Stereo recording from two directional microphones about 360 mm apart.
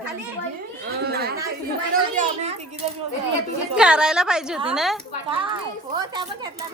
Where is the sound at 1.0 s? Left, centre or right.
Right.